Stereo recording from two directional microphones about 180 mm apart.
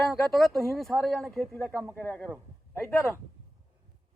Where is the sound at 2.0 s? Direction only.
10° left (ahead or behind).